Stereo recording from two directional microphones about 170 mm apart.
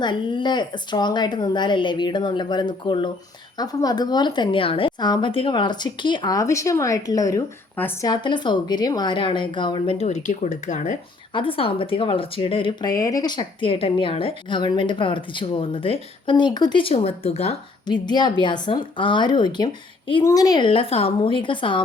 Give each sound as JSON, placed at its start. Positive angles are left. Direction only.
{"t": 0.0, "sound": "speech", "side_deg": 30}
{"t": 8.1, "sound": "speech", "side_deg": 25}
{"t": 11.3, "sound": "speech", "side_deg": 30}